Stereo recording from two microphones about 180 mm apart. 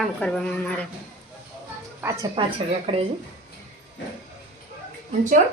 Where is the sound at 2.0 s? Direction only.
10° right (ahead or behind).